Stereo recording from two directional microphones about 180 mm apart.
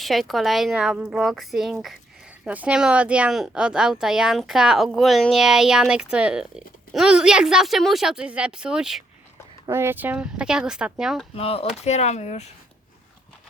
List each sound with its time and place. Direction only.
0.0 s a woman's voice: centre (ahead or behind)
9.6 s a woman's voice: 15° right (ahead or behind)
11.3 s speech: 30° left (ahead or behind)